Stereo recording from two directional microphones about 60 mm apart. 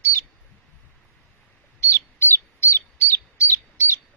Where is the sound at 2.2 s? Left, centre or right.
Left.